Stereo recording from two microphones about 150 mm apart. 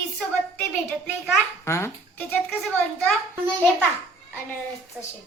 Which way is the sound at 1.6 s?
15° left (ahead or behind).